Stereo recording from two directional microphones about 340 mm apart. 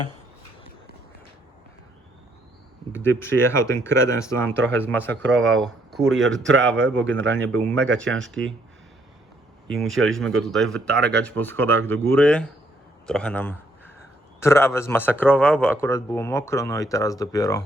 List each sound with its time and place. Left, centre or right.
2.9 s a man's voice: centre
6.4 s speech: right
7.3 s speech: centre
8.0 s speech: right
9.7 s a man's voice: centre